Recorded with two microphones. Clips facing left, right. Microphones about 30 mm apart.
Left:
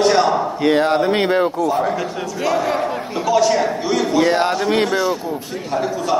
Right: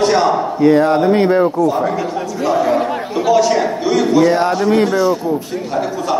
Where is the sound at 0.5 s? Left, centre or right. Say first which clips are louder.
Right 6 dB; left.